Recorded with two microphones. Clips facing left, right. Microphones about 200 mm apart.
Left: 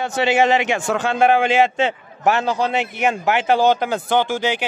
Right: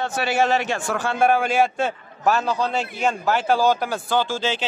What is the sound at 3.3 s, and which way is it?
Speech, 20° left (ahead or behind).